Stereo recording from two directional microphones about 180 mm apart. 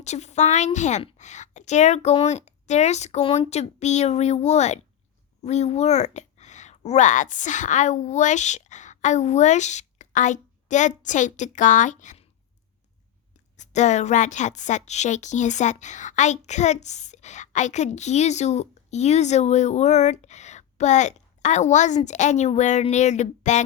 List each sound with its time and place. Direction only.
0.0 s a woman's voice: 40° left (ahead or behind)
13.6 s a woman's voice: 40° left (ahead or behind)